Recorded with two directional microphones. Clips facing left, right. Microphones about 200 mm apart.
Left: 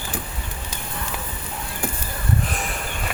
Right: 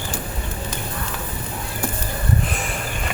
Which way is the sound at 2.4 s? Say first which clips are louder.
Right 1 dB; centre (ahead or behind).